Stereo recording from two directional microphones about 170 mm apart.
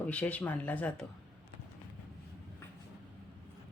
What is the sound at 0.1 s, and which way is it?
Speech, 10° left (ahead or behind).